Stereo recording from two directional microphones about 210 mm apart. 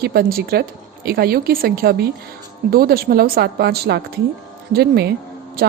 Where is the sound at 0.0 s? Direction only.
45° right (ahead or behind).